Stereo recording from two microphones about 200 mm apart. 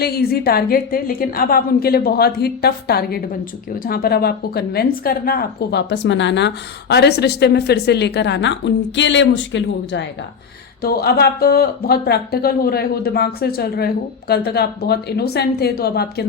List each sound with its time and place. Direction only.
0.0 s a woman's voice: 50° left (ahead or behind)
10.8 s speech: 50° left (ahead or behind)